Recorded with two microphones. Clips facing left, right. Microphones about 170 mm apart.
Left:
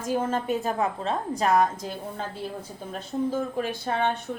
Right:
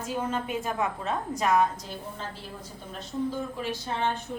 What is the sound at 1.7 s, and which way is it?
Speech, 55° left (ahead or behind).